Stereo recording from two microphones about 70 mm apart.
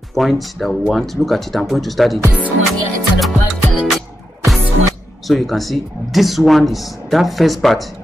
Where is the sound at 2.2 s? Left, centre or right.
Right.